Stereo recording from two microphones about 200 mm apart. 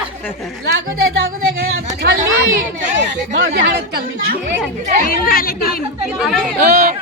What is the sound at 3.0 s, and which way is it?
Speech, 55° right (ahead or behind).